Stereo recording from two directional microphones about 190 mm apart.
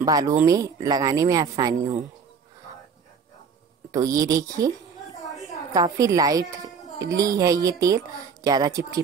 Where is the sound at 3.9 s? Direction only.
20° right (ahead or behind).